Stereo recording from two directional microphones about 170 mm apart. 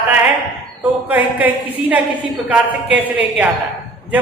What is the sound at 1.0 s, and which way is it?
A man's voice, 10° right (ahead or behind).